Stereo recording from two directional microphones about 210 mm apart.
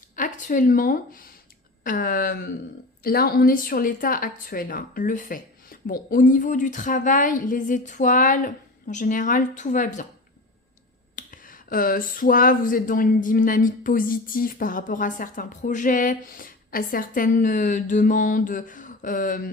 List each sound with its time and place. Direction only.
0.2 s a woman's voice: 35° left (ahead or behind)
11.1 s speech: 40° left (ahead or behind)